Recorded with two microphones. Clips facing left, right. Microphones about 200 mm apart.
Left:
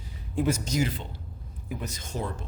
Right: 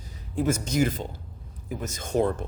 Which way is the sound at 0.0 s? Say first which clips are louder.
Even; 50° right (ahead or behind).